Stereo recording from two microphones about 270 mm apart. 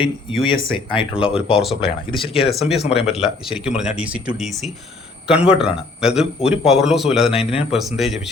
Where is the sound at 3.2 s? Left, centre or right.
Centre.